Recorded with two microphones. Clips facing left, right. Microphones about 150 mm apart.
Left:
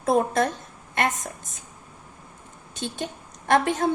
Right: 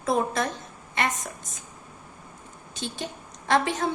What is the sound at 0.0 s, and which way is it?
Speech, 55° left (ahead or behind).